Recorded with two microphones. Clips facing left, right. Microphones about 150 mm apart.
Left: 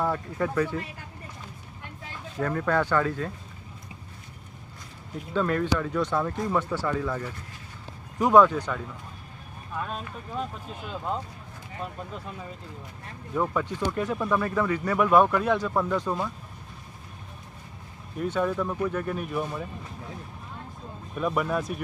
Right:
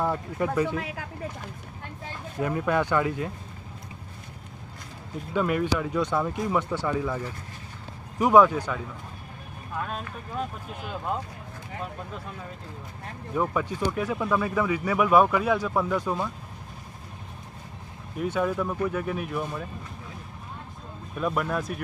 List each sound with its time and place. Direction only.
0.0 s speech: 15° right (ahead or behind)
0.8 s speech: 90° right
2.4 s speech: 15° right (ahead or behind)
5.3 s speech: 10° right (ahead or behind)
8.2 s speech: 10° right (ahead or behind)
13.3 s speech: 5° right (ahead or behind)
18.2 s speech: 5° right (ahead or behind)
21.2 s speech: centre (ahead or behind)